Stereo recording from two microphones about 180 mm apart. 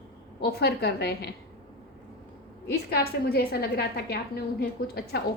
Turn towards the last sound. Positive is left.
turn(degrees=60)  # may be behind; listen again after turning